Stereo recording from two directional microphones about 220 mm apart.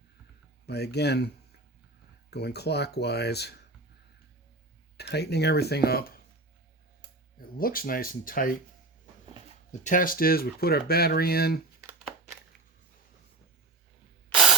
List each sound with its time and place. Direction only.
0.6 s speech: 50° left (ahead or behind)
2.3 s speech: 50° left (ahead or behind)
4.9 s speech: 50° left (ahead or behind)
7.3 s speech: 40° left (ahead or behind)
9.8 s speech: 40° left (ahead or behind)